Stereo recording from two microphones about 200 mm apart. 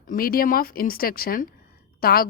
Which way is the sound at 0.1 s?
45° left (ahead or behind).